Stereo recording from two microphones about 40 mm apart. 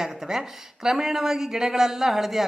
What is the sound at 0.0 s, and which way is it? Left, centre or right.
A woman's voice, centre.